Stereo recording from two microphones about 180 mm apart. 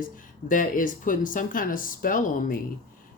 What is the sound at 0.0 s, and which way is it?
Speech, 50° left (ahead or behind).